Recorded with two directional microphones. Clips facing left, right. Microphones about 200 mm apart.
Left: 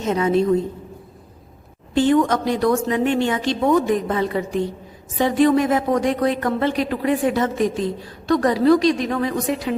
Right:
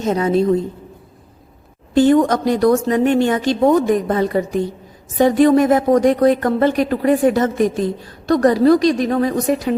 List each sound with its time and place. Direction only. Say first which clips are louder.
0.0 s a woman's voice: right 2 dB; 35° right (ahead or behind)
2.0 s a woman's voice: right 4 dB; 40° right (ahead or behind)